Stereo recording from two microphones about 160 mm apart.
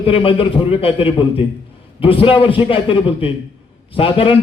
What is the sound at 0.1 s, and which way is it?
A man's voice, 35° left (ahead or behind).